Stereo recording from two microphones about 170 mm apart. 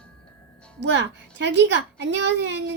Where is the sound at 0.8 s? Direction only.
90° right.